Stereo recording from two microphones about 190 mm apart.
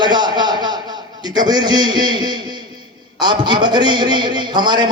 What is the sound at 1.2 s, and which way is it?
A man's voice, 20° right (ahead or behind).